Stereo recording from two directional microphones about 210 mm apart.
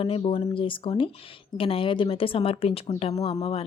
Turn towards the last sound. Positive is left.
turn(degrees=30)  # may be behind; listen again after turning